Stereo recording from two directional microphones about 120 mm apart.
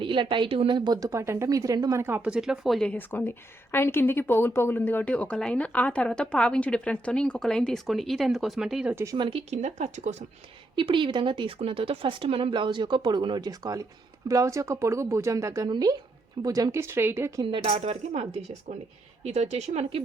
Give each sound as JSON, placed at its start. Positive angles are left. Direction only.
{"t": 0.0, "sound": "speech", "side_deg": -45}
{"t": 0.9, "sound": "speech", "side_deg": -30}
{"t": 2.3, "sound": "speech", "side_deg": -5}
{"t": 3.1, "sound": "speech", "side_deg": 15}
{"t": 9.1, "sound": "speech", "side_deg": -40}
{"t": 9.5, "sound": "speech", "side_deg": -75}
{"t": 10.8, "sound": "speech", "side_deg": -45}
{"t": 17.4, "sound": "speech", "side_deg": -45}
{"t": 17.7, "sound": "speech", "side_deg": -60}